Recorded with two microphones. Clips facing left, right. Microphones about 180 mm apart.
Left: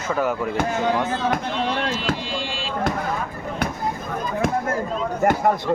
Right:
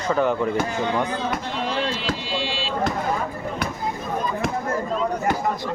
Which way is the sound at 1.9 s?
50° left (ahead or behind).